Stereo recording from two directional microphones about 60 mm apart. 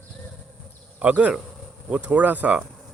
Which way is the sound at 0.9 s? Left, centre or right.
Right.